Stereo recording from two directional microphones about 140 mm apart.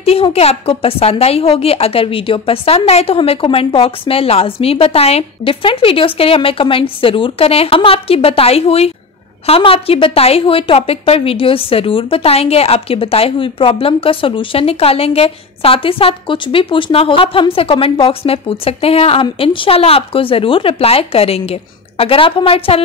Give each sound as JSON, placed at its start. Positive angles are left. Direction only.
{"t": 0.0, "sound": "a woman's voice", "side_deg": 45}